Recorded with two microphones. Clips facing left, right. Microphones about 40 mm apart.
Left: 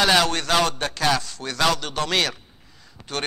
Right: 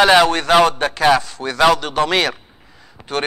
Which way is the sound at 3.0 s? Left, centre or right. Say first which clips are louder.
Right 7 dB; centre.